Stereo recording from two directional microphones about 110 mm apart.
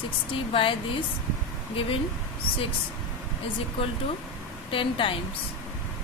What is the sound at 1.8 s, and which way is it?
Speech, 55° left (ahead or behind).